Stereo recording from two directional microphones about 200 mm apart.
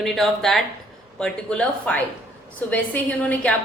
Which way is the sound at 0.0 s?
Centre (ahead or behind).